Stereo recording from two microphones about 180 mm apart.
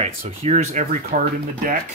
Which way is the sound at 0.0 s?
35° right (ahead or behind).